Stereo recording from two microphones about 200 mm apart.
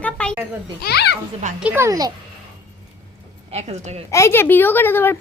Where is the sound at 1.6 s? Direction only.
10° right (ahead or behind).